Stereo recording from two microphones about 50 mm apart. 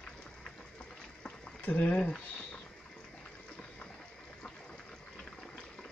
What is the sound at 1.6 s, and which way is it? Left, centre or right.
Speech, left.